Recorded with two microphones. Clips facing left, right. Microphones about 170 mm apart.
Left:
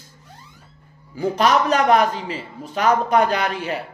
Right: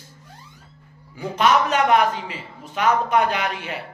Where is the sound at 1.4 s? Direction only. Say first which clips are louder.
Even; 35° left (ahead or behind).